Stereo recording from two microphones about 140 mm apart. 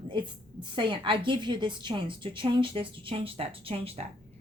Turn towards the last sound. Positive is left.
turn(degrees=-40)  # may be behind; listen again after turning